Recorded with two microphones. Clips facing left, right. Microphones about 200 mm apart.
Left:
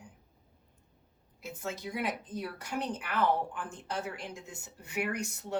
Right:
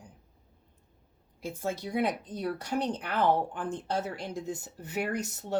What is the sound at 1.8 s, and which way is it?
Speech, 35° right (ahead or behind).